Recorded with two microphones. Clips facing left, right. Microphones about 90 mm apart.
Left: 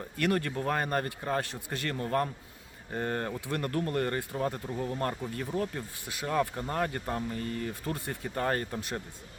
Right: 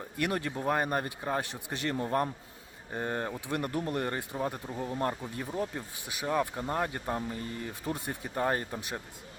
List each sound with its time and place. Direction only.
0.2 s speech: 15° right (ahead or behind)